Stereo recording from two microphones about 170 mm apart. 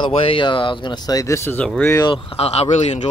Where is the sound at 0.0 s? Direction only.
30° left (ahead or behind); by 2.0 s 10° left (ahead or behind).